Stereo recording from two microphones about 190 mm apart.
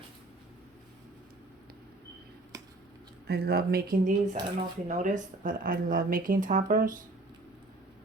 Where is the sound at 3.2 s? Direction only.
55° right (ahead or behind).